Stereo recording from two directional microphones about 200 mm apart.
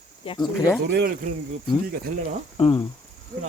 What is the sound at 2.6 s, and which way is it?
Speech, 25° left (ahead or behind).